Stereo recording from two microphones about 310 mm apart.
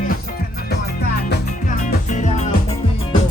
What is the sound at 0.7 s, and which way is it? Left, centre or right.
Music, left.